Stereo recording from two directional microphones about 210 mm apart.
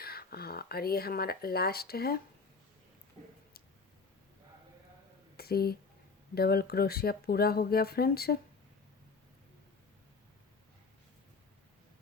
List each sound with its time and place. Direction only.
0.0 s speech: 45° left (ahead or behind)
5.4 s a sound: 45° left (ahead or behind)
6.3 s speech: 45° left (ahead or behind)